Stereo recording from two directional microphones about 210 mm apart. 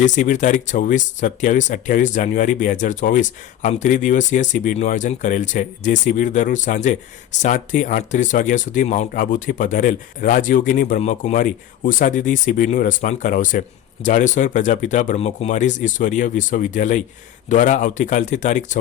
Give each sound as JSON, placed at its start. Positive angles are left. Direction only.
{"t": 0.0, "sound": "speech", "side_deg": 35}